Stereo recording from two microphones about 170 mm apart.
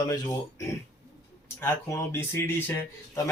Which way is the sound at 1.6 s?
15° left (ahead or behind).